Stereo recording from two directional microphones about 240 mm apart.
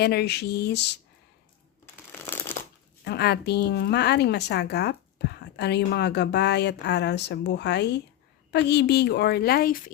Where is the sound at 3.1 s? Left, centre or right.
Left.